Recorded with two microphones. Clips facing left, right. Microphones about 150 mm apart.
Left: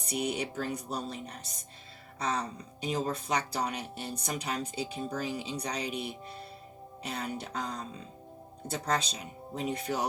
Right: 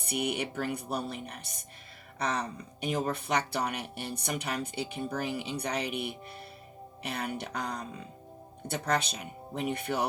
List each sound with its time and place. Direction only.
0.0 s speech: 60° right (ahead or behind)
2.1 s a sound: 65° right (ahead or behind)
2.8 s speech: 60° right (ahead or behind)